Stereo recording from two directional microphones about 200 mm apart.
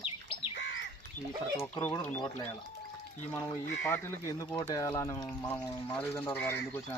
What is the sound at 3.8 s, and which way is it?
Speech, 10° left (ahead or behind).